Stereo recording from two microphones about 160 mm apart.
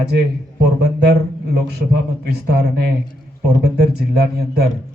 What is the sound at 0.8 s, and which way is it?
Speech, 90° right.